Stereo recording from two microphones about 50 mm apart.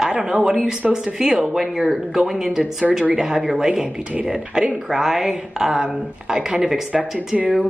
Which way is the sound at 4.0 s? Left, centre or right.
Right.